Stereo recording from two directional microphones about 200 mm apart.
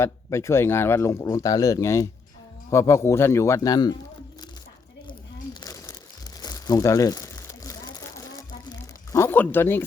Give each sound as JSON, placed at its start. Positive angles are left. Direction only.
{"t": 0.0, "sound": "speech", "side_deg": 15}
{"t": 5.5, "sound": "crumpling", "side_deg": 15}
{"t": 9.1, "sound": "speech", "side_deg": 10}